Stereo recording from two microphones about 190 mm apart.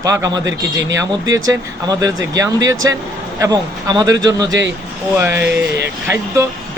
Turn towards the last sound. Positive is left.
turn(degrees=-15)  # may be behind; listen again after turning